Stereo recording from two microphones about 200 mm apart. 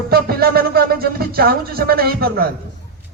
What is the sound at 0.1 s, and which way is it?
Speech, 50° right (ahead or behind).